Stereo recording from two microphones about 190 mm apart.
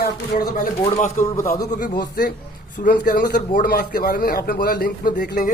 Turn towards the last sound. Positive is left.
turn(degrees=50)  # may be behind; listen again after turning